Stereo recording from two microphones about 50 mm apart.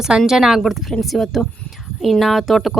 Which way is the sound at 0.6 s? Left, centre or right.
Centre.